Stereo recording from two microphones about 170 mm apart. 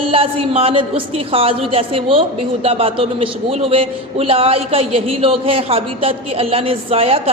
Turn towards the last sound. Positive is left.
turn(degrees=-35)  # may be behind; listen again after turning